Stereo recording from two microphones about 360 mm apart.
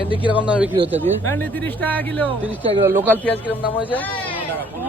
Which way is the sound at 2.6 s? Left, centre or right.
Centre.